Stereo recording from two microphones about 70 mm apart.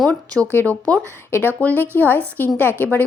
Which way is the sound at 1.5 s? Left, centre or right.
Left.